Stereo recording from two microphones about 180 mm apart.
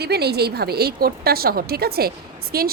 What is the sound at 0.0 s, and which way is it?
A woman's voice, 65° right (ahead or behind).